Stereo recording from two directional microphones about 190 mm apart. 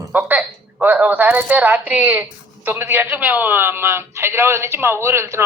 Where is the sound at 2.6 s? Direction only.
10° right (ahead or behind).